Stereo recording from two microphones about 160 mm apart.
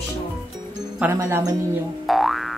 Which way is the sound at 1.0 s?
10° right (ahead or behind).